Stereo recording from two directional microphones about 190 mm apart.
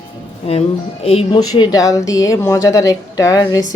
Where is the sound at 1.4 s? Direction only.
20° left (ahead or behind).